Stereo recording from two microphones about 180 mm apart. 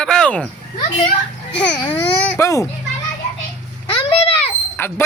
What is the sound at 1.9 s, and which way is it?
Speech, 15° left (ahead or behind).